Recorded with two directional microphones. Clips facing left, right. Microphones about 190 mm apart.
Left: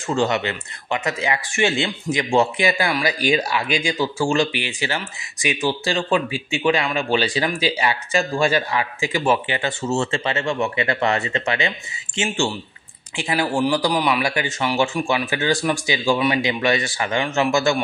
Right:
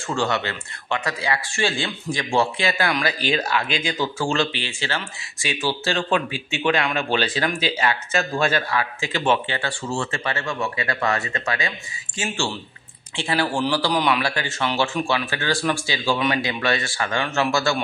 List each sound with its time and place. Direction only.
0.0 s speech: 20° left (ahead or behind)
9.6 s speech: 20° left (ahead or behind)